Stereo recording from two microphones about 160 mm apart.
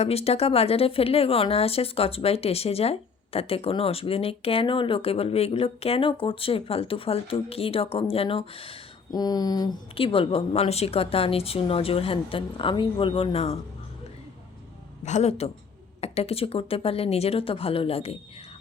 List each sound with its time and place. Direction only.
0.0 s speech: 40° left (ahead or behind)
15.0 s speech: 45° left (ahead or behind)